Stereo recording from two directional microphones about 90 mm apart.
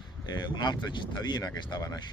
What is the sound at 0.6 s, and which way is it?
Speech, 55° left (ahead or behind).